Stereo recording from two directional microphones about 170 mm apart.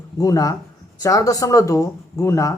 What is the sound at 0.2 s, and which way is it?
Speech, 20° left (ahead or behind).